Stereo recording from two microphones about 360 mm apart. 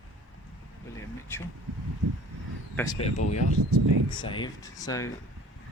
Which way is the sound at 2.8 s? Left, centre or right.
Centre.